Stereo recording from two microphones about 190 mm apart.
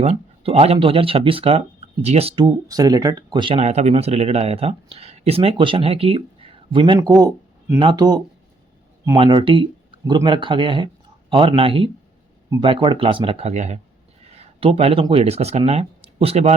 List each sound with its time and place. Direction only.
0.0 s speech: 30° right (ahead or behind)
14.3 s a sound: 30° right (ahead or behind)
15.0 s speech: 30° right (ahead or behind)